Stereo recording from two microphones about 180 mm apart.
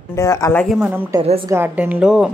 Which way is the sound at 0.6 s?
Centre (ahead or behind).